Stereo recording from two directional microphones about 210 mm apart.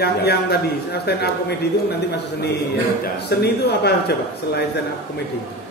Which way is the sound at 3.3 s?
50° left (ahead or behind).